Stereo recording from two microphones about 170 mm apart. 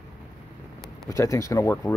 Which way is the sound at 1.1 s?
20° left (ahead or behind).